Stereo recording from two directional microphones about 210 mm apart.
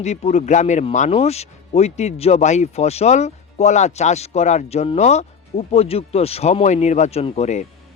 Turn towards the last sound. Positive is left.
turn(degrees=30)  # may be behind; listen again after turning